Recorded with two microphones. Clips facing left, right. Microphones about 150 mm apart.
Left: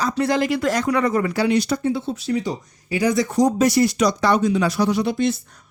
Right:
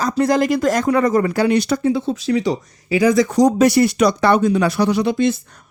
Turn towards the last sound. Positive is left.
turn(degrees=-85)